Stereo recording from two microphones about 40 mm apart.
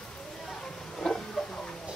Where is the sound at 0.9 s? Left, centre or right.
Centre.